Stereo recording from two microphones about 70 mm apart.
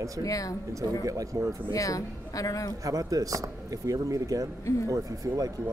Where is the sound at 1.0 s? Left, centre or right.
Right.